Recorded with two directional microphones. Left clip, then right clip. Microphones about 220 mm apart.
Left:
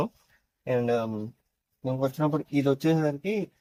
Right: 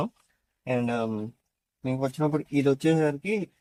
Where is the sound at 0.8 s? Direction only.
Centre (ahead or behind).